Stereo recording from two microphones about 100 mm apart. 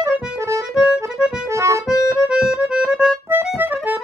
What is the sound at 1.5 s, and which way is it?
Accordion, 30° right (ahead or behind).